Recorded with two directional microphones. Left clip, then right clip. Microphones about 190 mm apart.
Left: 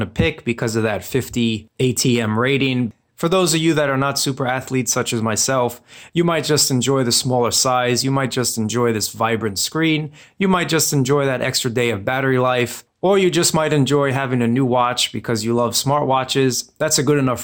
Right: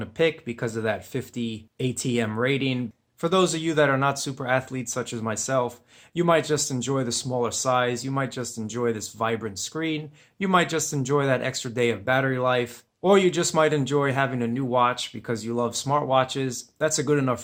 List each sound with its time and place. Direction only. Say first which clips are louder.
0.0 s speech: left 3 dB; 30° left (ahead or behind)